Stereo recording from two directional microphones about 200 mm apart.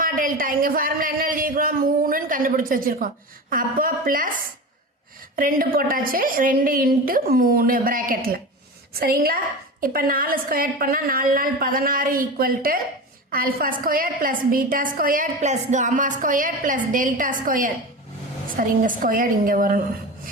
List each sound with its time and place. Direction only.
0.0 s speech: 45° right (ahead or behind)
5.4 s a woman's voice: 45° right (ahead or behind)